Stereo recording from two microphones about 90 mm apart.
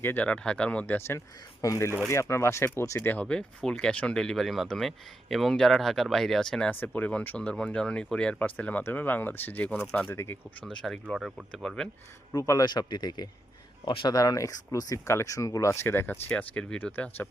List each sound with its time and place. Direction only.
0.0 s speech: 20° left (ahead or behind)
1.6 s speech: 40° left (ahead or behind)
3.0 s speech: 20° left (ahead or behind)
3.2 s speech: 10° left (ahead or behind)
6.7 s speech: 20° left (ahead or behind)
10.7 s speech: 10° left (ahead or behind)
11.2 s speech: 5° right (ahead or behind)
11.6 s speech: 10° left (ahead or behind)
12.3 s speech: 40° left (ahead or behind)
12.7 s speech: 55° left (ahead or behind)
13.8 s speech: 60° left (ahead or behind)
14.1 s speech: 40° left (ahead or behind); by 16.1 s 25° left (ahead or behind)
16.3 s speech: 10° left (ahead or behind)